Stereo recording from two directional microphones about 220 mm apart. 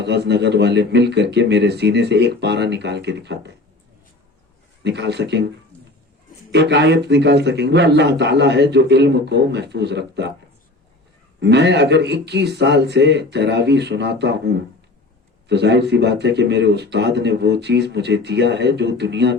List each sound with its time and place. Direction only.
0.0 s speech: 50° right (ahead or behind)
4.8 s speech: 50° right (ahead or behind)
6.5 s speech: 50° right (ahead or behind)
11.3 s speech: 50° right (ahead or behind)